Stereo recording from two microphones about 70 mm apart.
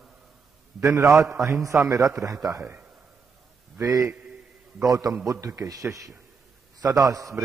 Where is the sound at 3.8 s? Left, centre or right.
Right.